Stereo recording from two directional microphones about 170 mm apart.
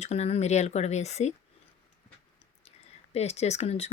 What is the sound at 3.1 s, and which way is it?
Speech, 40° left (ahead or behind).